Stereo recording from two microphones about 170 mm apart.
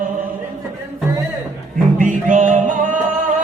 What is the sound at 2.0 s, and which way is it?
Music, 50° right (ahead or behind).